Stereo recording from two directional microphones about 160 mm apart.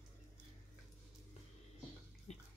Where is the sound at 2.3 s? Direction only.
40° left (ahead or behind).